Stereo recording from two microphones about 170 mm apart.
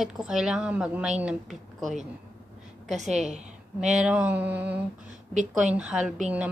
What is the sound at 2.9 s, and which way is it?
A woman's voice, 40° right (ahead or behind).